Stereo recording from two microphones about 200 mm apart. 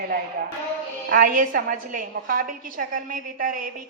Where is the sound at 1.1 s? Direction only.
45° right (ahead or behind).